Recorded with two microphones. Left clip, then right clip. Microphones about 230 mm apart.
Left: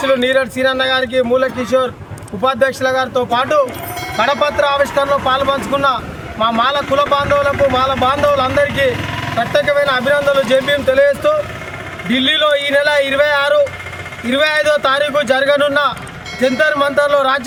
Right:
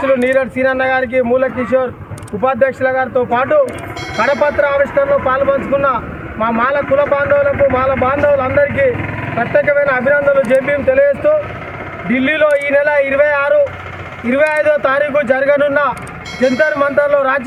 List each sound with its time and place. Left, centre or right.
0.0 s speech: left
12.1 s speech: left